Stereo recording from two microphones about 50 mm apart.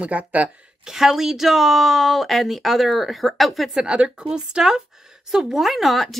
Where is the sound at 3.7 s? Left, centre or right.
Centre.